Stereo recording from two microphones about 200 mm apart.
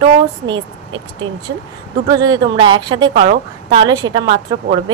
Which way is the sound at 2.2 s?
20° right (ahead or behind).